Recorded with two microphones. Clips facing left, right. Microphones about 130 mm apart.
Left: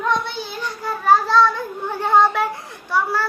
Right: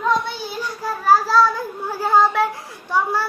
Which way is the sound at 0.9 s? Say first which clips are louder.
Even; 5° right (ahead or behind).